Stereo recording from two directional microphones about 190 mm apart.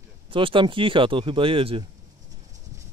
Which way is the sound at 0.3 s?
25° right (ahead or behind).